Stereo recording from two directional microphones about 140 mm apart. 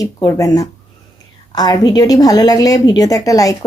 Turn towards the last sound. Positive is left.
turn(degrees=25)  # may be behind; listen again after turning